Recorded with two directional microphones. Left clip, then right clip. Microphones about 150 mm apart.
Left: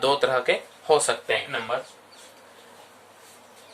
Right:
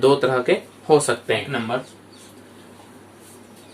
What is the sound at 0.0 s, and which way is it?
Speech, 30° left (ahead or behind).